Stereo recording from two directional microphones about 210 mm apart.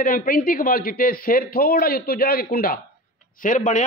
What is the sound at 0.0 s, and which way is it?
A man's voice, 40° left (ahead or behind).